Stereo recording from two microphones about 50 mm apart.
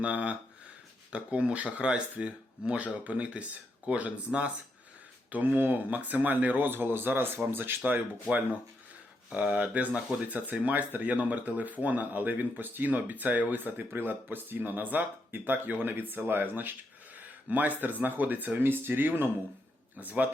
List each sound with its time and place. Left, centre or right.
0.0 s speech: right
9.3 s speech: right